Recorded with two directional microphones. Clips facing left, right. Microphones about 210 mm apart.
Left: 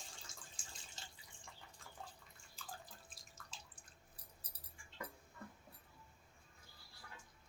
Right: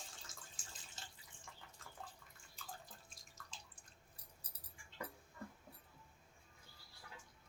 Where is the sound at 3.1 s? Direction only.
Centre (ahead or behind).